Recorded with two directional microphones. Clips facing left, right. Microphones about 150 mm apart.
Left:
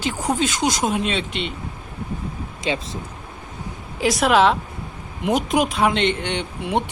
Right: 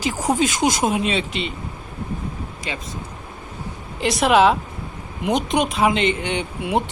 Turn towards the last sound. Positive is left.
turn(degrees=-5)  # may be behind; listen again after turning